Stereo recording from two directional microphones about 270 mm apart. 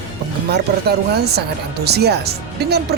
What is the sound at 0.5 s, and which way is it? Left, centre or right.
Speech, right.